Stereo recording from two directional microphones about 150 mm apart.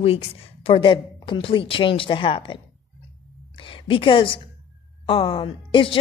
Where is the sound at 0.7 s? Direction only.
35° left (ahead or behind).